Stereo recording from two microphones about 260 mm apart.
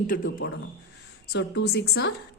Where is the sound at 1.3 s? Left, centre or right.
Left.